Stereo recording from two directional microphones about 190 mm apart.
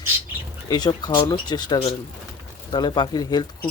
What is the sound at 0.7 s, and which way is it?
Speech, 20° left (ahead or behind).